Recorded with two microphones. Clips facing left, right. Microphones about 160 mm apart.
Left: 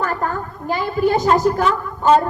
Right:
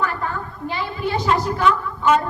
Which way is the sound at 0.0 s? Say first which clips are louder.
Left 3 dB; 45° left (ahead or behind).